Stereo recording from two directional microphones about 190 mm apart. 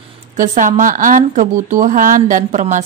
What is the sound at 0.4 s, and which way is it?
Speech, 40° right (ahead or behind).